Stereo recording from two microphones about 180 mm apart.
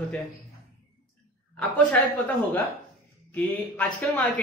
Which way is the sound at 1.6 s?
10° left (ahead or behind).